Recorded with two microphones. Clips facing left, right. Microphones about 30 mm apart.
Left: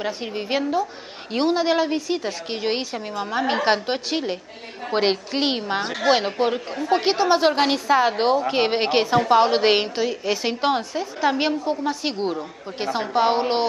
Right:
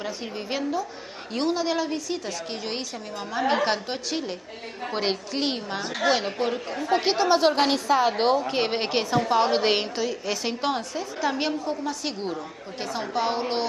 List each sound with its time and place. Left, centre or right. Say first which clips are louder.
0.0 s a woman's voice: left 5 dB; left